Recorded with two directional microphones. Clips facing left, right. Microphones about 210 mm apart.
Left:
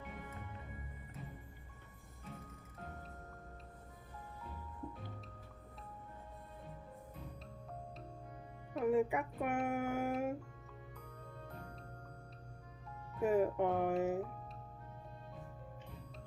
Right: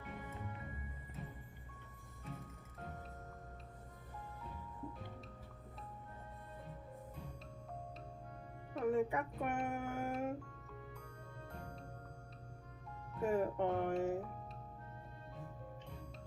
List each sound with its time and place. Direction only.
8.7 s speech: 5° left (ahead or behind)
13.1 s speech: 5° left (ahead or behind)